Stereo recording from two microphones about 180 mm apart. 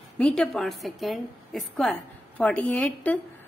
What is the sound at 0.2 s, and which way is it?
A woman's voice, 5° left (ahead or behind).